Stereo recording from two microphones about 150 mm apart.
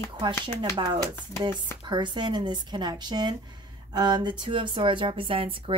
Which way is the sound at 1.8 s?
30° right (ahead or behind).